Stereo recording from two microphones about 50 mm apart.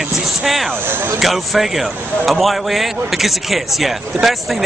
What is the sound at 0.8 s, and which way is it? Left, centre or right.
Speech, right.